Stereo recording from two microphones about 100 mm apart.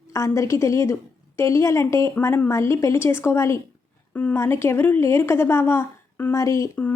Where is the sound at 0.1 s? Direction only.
30° left (ahead or behind).